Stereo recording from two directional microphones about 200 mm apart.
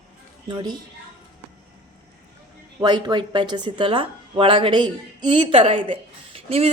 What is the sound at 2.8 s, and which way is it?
Speech, 20° right (ahead or behind).